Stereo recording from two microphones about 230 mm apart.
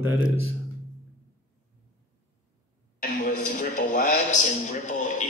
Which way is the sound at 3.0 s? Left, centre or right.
Left.